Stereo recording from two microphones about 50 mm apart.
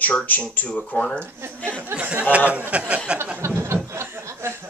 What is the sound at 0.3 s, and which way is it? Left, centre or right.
Speech, left.